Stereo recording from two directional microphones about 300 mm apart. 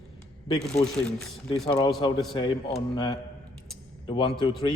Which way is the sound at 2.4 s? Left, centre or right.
Centre.